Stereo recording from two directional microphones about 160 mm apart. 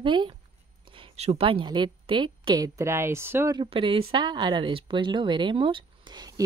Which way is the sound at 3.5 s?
30° right (ahead or behind).